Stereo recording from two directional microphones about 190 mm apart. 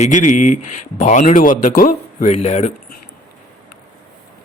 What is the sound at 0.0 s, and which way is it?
A man's voice, 40° left (ahead or behind).